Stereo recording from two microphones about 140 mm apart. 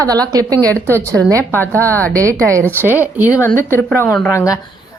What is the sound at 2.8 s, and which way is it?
Speech, 15° right (ahead or behind).